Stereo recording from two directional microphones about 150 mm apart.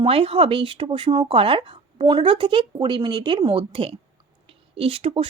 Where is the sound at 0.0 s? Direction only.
40° right (ahead or behind).